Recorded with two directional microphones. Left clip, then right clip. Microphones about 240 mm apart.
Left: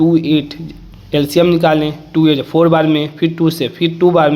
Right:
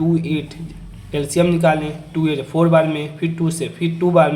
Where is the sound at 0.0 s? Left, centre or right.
Left.